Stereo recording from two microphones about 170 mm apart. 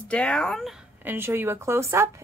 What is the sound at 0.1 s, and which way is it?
Speech, 5° left (ahead or behind).